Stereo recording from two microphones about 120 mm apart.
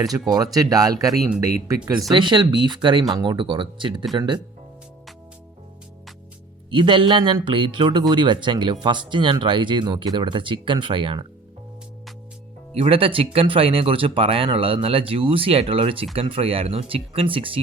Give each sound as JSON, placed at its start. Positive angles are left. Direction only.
{"t": 0.0, "sound": "speech", "side_deg": -30}
{"t": 6.7, "sound": "speech", "side_deg": -45}
{"t": 12.7, "sound": "speech", "side_deg": -50}